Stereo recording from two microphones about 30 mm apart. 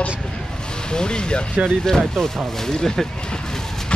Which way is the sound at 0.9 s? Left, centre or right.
Left.